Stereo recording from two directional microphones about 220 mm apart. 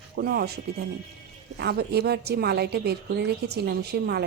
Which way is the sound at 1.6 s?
45° right (ahead or behind).